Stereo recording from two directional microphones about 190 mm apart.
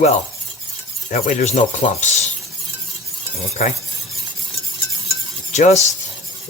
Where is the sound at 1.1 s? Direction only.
45° left (ahead or behind).